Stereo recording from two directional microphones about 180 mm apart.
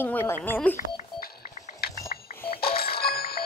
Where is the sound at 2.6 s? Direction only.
60° left (ahead or behind).